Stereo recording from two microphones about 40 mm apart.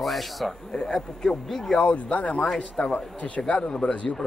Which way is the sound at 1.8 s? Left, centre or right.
Left.